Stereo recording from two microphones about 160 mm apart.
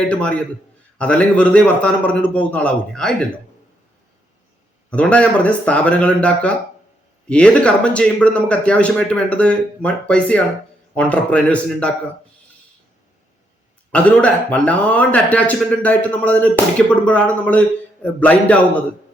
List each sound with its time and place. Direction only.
0.1 s a man's voice: 10° left (ahead or behind)
4.9 s a man's voice: 10° left (ahead or behind)
13.9 s a man's voice: 10° left (ahead or behind)